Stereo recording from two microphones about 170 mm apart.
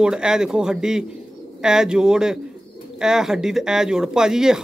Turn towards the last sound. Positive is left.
turn(degrees=-5)  # may be behind; listen again after turning